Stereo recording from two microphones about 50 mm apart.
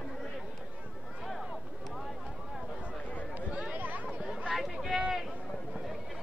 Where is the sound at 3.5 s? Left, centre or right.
Right.